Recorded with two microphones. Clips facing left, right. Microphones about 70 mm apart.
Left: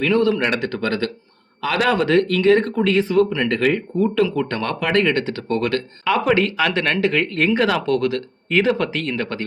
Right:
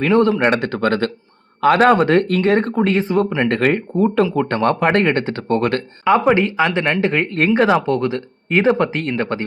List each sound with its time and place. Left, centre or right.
0.0 s speech: right